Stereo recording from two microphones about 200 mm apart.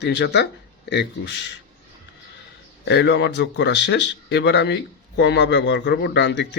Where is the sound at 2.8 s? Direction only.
60° left (ahead or behind).